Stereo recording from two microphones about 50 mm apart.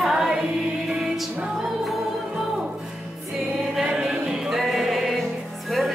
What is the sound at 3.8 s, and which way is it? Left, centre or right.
Music, centre.